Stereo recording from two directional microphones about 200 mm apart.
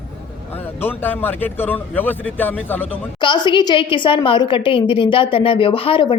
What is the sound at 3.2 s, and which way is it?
A woman's voice, 25° left (ahead or behind).